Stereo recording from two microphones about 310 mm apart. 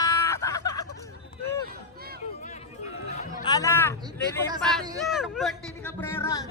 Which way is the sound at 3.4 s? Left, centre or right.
Centre.